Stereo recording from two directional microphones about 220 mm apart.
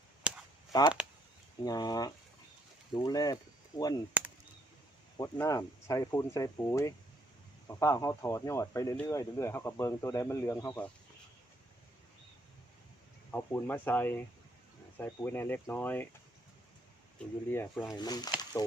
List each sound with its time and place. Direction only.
0.3 s a sound: 5° right (ahead or behind)
0.7 s speech: 15° left (ahead or behind)
5.1 s speech: 15° left (ahead or behind)
13.3 s speech: 10° left (ahead or behind)
17.5 s speech: 10° left (ahead or behind)